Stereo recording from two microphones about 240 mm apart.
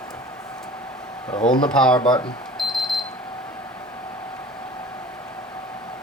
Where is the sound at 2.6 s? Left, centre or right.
Centre.